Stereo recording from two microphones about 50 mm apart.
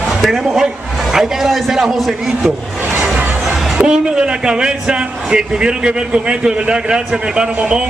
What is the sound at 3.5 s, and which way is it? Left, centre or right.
A man's voice, centre.